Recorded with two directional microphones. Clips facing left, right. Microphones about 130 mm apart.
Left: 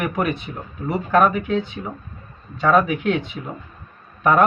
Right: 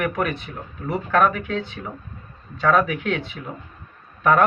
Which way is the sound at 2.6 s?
15° left (ahead or behind).